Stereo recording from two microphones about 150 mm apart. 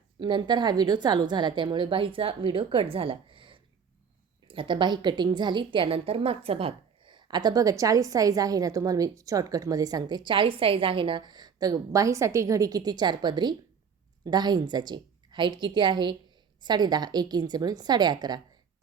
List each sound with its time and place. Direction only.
0.2 s a woman's voice: 30° right (ahead or behind)